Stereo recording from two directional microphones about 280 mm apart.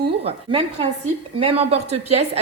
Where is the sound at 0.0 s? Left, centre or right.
Centre.